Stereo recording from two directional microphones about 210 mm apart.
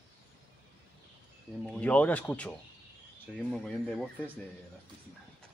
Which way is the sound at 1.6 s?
5° left (ahead or behind).